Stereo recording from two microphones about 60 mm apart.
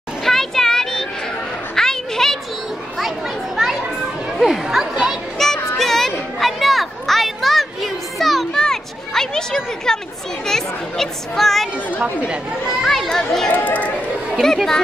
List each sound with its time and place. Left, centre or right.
0.2 s a sound: centre
3.5 s children playing: centre
4.4 s music: centre
5.4 s child singing: centre
5.8 s a sound: centre
10.4 s speech: centre
12.8 s speech: centre
13.7 s chatter: left
14.4 s speech: centre